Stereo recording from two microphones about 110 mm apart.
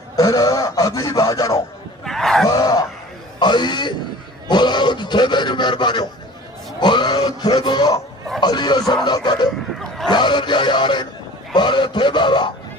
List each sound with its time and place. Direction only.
0.1 s a man's voice: 35° left (ahead or behind)
2.0 s groan: 5° left (ahead or behind)
2.4 s groan: 35° left (ahead or behind)
3.3 s a man's voice: 40° left (ahead or behind)